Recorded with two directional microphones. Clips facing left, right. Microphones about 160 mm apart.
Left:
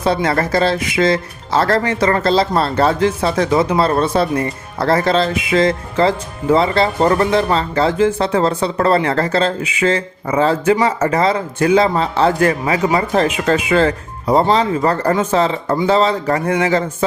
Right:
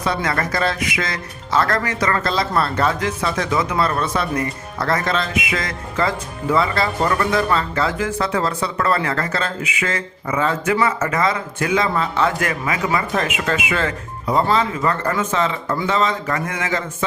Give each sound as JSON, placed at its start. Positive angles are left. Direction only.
{"t": 0.0, "sound": "speech", "side_deg": 30}